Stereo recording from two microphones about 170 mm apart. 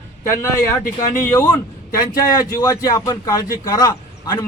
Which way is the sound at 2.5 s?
20° left (ahead or behind).